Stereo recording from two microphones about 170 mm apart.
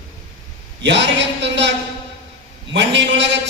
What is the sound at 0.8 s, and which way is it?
Speech, 90° right.